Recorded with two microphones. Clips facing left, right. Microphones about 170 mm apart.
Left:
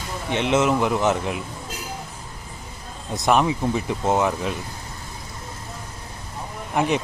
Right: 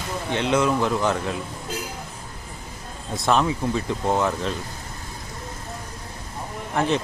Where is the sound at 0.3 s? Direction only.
20° left (ahead or behind).